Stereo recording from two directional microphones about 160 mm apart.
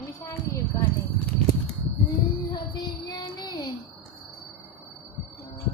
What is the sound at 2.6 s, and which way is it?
Child singing, 25° left (ahead or behind).